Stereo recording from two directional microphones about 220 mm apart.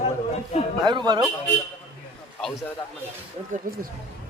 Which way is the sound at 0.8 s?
20° right (ahead or behind).